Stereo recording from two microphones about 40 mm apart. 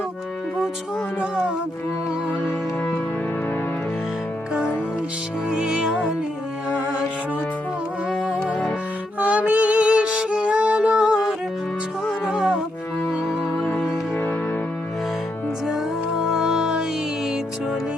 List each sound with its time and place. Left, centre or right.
1.2 s music: right
5.5 s music: right
8.2 s music: right
13.6 s music: left
15.6 s music: centre